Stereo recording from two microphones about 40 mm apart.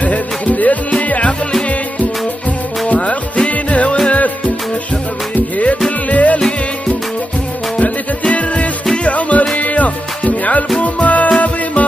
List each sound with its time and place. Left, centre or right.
0.0 s music: left
2.9 s music: left
5.3 s music: left
8.2 s music: left